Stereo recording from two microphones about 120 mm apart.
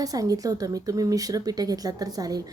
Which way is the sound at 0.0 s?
30° right (ahead or behind).